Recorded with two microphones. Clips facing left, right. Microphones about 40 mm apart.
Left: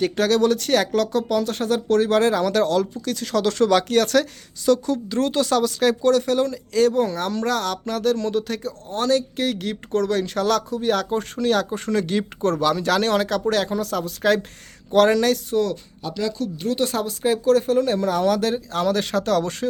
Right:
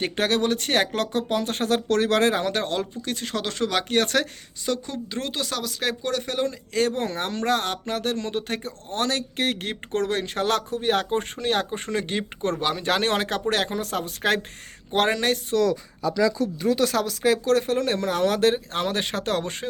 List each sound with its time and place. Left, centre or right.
0.0 s speech: right
2.4 s speech: right
3.8 s speech: right; by 5.7 s centre
5.8 s speech: centre
6.7 s speech: right
14.8 s speech: right
16.9 s speech: right